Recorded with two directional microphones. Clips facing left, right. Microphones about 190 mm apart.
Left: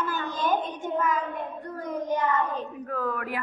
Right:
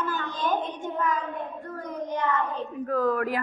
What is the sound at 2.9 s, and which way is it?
Speech, 40° right (ahead or behind).